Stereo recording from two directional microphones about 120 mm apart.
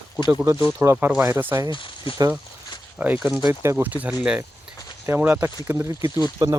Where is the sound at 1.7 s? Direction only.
45° left (ahead or behind).